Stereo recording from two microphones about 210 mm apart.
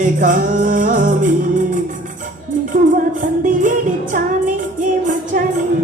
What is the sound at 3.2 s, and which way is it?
Music, 40° right (ahead or behind).